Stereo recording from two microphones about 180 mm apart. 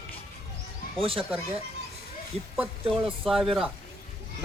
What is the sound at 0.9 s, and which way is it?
Speech, 30° right (ahead or behind).